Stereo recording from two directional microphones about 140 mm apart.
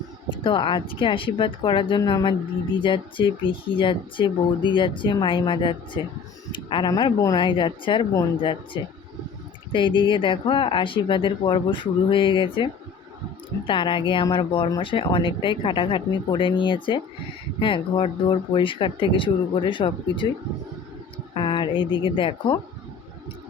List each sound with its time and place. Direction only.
0.3 s speech: 35° left (ahead or behind)
21.3 s speech: 35° left (ahead or behind)